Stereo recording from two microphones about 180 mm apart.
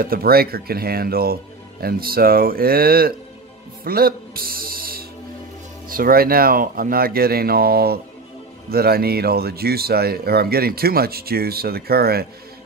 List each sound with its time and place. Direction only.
0.0 s speech: 55° right (ahead or behind)